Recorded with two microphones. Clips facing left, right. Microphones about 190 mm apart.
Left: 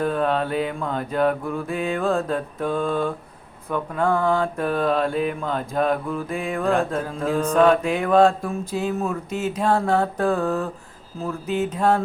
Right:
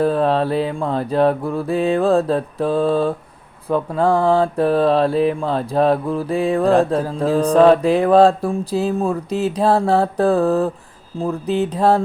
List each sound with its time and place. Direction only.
0.0 s mantra: 35° right (ahead or behind)